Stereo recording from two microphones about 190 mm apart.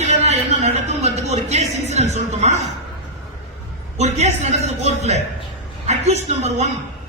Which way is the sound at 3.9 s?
35° right (ahead or behind).